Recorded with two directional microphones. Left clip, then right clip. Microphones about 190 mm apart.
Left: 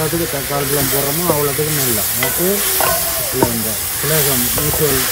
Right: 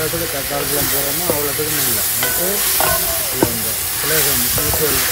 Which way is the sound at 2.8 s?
Centre (ahead or behind).